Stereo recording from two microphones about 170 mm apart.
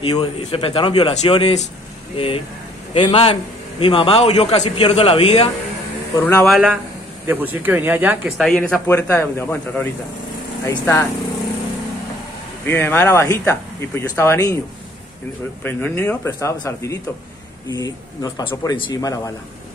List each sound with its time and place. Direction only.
0.0 s a man's voice: 30° left (ahead or behind)
6.4 s speech: centre (ahead or behind)
8.4 s speech: 5° left (ahead or behind)
12.6 s speech: 10° left (ahead or behind)
15.6 s speech: 10° left (ahead or behind)